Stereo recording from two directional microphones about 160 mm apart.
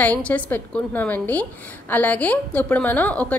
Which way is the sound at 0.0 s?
10° left (ahead or behind).